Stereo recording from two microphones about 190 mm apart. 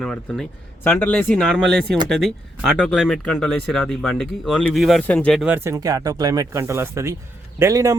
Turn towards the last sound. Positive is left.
turn(degrees=-15)  # may be behind; listen again after turning